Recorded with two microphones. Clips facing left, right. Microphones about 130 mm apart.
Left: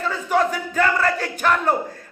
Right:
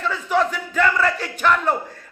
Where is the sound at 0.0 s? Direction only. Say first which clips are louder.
Even; 45° left (ahead or behind).